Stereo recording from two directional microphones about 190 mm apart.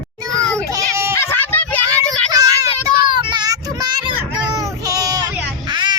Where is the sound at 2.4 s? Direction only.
20° right (ahead or behind).